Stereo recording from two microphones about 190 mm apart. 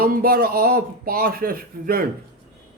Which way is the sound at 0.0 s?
50° right (ahead or behind).